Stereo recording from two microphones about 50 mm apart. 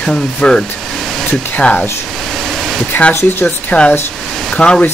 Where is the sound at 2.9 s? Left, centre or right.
Left.